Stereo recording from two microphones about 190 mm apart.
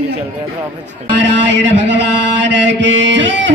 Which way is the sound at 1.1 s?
70° right (ahead or behind).